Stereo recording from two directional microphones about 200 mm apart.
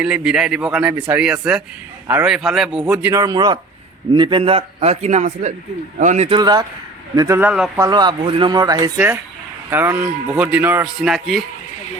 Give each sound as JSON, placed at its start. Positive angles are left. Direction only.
{"t": 0.0, "sound": "a man's voice", "side_deg": -5}
{"t": 7.8, "sound": "speech", "side_deg": -20}